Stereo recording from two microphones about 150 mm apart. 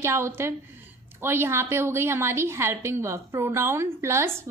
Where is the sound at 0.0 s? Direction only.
20° right (ahead or behind).